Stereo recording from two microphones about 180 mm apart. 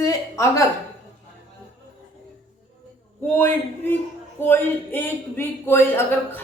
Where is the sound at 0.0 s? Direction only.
20° left (ahead or behind).